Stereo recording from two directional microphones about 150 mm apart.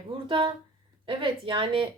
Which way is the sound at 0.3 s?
35° right (ahead or behind).